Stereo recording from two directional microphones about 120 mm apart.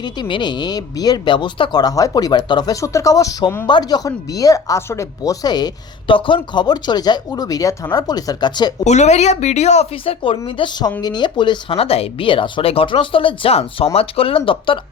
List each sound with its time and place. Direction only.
0.0 s speech: 40° left (ahead or behind); by 3.7 s 25° left (ahead or behind)
3.7 s speech: 35° left (ahead or behind)
8.8 s speech: 70° left (ahead or behind); by 10.3 s 50° left (ahead or behind)
10.4 s speech: 40° left (ahead or behind)